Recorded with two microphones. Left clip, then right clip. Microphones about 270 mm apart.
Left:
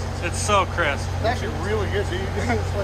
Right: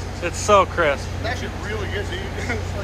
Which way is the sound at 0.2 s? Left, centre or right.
Centre.